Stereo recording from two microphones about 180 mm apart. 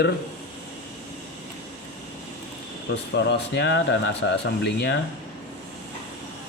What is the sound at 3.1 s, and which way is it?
Speech, 75° left (ahead or behind).